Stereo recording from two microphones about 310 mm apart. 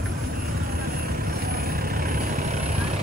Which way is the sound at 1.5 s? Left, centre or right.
Right.